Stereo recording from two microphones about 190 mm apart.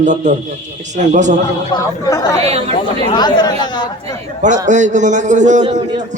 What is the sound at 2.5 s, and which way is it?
Speech, 30° right (ahead or behind).